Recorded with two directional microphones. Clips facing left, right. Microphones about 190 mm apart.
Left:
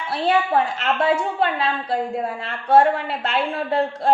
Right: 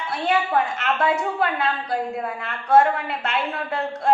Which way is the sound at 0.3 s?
30° left (ahead or behind).